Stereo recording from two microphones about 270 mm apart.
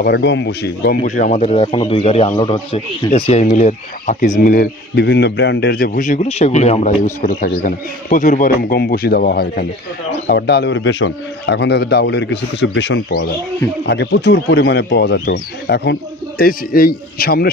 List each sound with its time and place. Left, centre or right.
0.0 s speech: left